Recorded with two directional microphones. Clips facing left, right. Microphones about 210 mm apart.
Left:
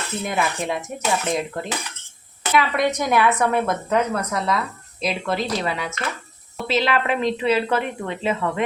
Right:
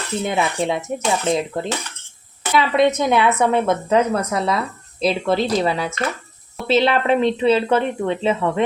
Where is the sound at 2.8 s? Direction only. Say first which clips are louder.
Right 7 dB; 25° right (ahead or behind).